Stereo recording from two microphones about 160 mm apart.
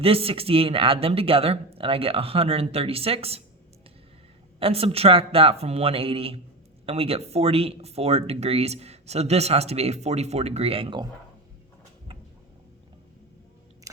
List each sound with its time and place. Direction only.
0.0 s speech: 35° right (ahead or behind)
4.6 s speech: 35° right (ahead or behind)